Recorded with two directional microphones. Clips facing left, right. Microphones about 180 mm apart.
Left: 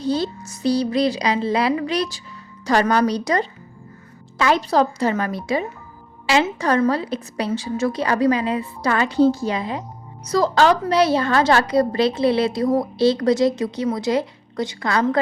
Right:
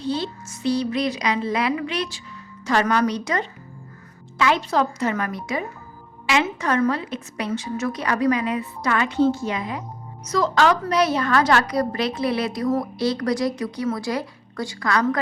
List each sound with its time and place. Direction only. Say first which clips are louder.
0.0 s a woman's voice: left 4 dB; 40° left (ahead or behind)